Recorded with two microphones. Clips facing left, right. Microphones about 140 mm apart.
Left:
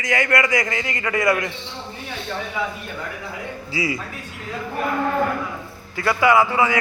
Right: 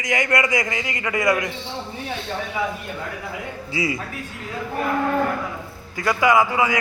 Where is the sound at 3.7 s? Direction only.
25° right (ahead or behind).